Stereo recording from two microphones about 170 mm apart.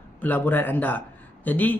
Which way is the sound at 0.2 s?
10° left (ahead or behind).